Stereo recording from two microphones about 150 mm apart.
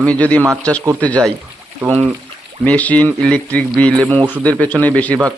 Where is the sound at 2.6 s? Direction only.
10° left (ahead or behind).